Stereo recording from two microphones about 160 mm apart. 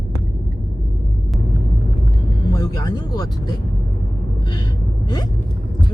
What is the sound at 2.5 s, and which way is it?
Speech, 25° left (ahead or behind).